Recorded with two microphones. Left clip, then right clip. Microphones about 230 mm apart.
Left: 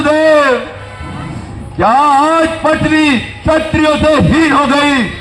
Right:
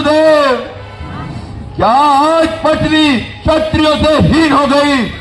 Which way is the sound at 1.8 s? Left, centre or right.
Right.